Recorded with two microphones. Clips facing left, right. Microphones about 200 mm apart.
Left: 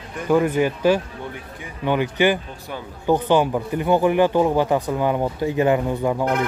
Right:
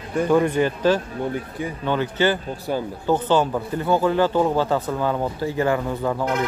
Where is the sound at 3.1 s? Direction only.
15° left (ahead or behind).